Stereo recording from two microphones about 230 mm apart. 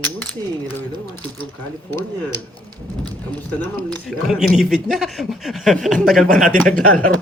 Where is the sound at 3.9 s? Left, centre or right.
Centre.